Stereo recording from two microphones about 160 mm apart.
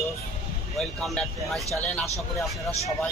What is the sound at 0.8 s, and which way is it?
Speech, centre (ahead or behind).